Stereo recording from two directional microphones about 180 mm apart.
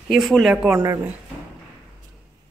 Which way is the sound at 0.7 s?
15° right (ahead or behind).